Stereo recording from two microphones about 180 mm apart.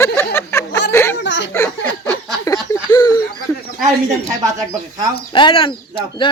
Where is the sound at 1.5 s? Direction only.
15° left (ahead or behind).